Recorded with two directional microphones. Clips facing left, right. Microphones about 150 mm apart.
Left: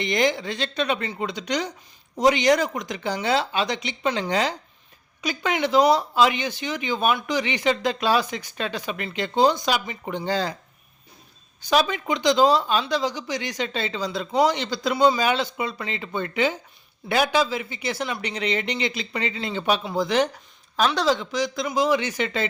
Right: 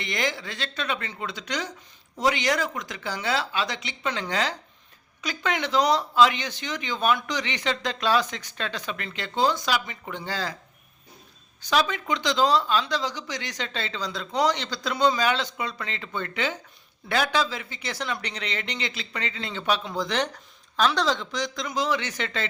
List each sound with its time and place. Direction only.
0.0 s speech: 20° left (ahead or behind)
11.7 s speech: 15° left (ahead or behind)